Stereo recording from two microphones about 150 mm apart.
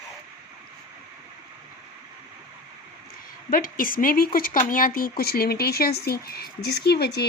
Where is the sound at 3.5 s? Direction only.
70° left (ahead or behind); by 7.2 s 90° left.